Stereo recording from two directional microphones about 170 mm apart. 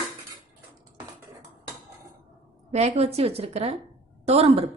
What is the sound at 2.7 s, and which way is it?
A woman's voice, 40° right (ahead or behind).